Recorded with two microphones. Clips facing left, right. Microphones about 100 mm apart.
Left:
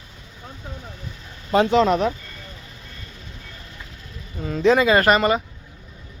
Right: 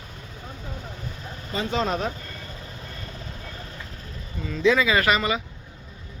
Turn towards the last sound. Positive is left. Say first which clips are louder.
# left 5 dB
turn(degrees=45)  # may be behind; listen again after turning